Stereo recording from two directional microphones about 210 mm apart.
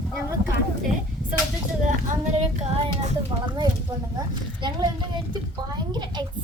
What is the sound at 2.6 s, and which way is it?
Child singing, 30° right (ahead or behind).